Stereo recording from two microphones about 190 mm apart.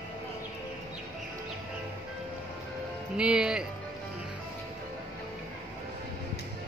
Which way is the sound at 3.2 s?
5° right (ahead or behind).